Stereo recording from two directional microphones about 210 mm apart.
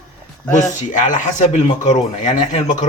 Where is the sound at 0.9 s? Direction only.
35° left (ahead or behind).